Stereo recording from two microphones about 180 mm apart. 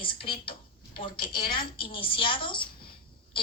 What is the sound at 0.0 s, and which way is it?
A woman's voice, 30° left (ahead or behind).